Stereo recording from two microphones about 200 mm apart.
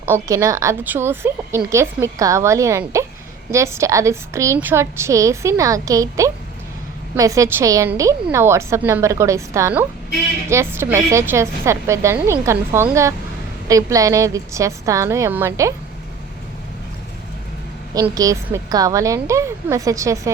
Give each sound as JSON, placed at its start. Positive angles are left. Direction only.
{"t": 0.0, "sound": "a woman's voice", "side_deg": -10}
{"t": 18.1, "sound": "a woman's voice", "side_deg": -15}